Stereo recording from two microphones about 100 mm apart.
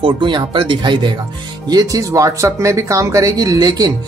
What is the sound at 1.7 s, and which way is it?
Speech, 40° right (ahead or behind).